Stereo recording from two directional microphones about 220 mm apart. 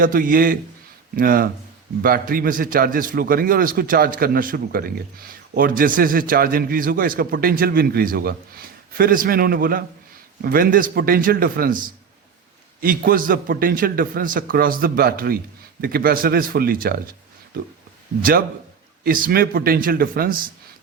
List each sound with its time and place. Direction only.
0.0 s a man's voice: 40° right (ahead or behind)
18.2 s a man's voice: 40° right (ahead or behind)